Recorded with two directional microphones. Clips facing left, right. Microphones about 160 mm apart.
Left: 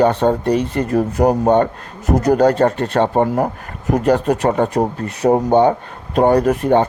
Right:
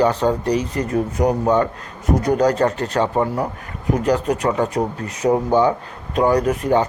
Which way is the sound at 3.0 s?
40° left (ahead or behind).